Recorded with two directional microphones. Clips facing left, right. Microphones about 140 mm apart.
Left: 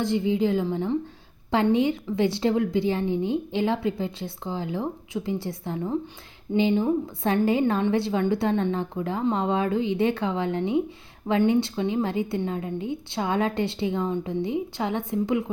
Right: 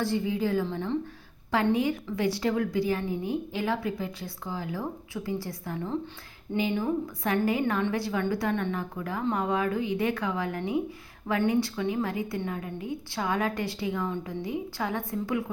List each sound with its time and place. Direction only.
0.0 s a woman's voice: 20° left (ahead or behind)